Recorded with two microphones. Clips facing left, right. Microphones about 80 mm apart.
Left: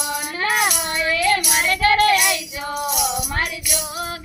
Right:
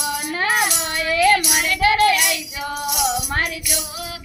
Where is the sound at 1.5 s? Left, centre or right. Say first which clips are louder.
Even; left.